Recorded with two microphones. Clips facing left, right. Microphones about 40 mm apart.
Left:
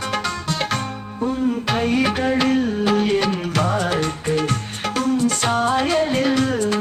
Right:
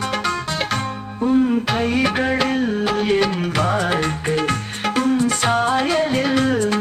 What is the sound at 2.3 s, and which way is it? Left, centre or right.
Music, centre.